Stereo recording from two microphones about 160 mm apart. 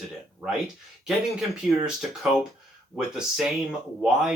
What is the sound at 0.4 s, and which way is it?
Speech, 5° right (ahead or behind).